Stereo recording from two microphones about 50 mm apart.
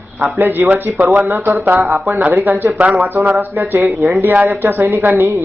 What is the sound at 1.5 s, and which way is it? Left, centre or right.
Speech, right.